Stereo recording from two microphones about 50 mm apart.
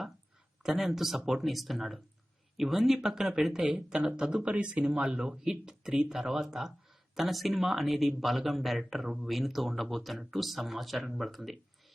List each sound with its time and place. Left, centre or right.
0.6 s speech: centre